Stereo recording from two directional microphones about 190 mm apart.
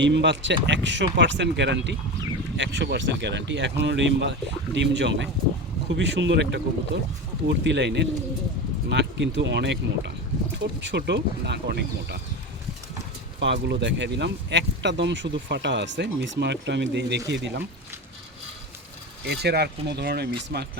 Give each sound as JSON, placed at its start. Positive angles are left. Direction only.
{"t": 0.0, "sound": "speech", "side_deg": -70}
{"t": 13.4, "sound": "speech", "side_deg": -70}
{"t": 19.2, "sound": "speech", "side_deg": -60}